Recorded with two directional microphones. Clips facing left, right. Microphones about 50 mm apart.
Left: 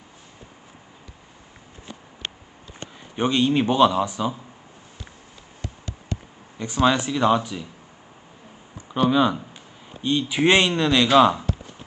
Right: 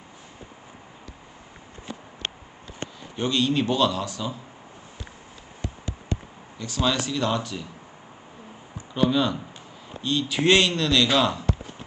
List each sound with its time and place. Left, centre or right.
3.2 s speech: left
5.6 s a sound: right
6.6 s speech: left
9.0 s speech: centre